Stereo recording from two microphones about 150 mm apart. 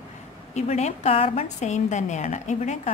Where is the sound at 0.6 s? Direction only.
50° left (ahead or behind).